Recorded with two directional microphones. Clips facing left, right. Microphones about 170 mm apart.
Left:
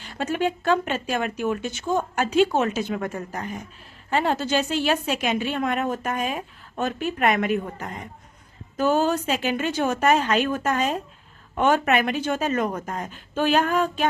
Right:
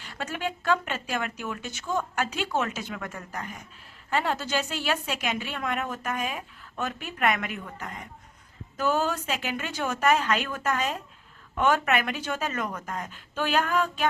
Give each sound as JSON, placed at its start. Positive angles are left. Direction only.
{"t": 0.1, "sound": "a woman's voice", "side_deg": 25}